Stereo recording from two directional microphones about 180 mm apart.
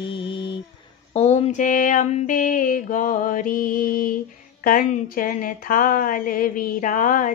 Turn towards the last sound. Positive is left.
turn(degrees=50)  # may be behind; listen again after turning